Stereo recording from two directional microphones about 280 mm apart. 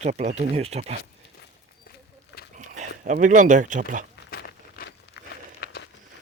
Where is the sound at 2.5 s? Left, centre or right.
Right.